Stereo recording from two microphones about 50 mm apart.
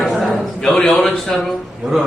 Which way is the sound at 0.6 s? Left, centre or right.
Centre.